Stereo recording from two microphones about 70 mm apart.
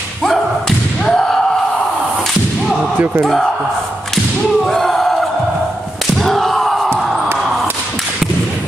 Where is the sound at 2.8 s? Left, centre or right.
Right.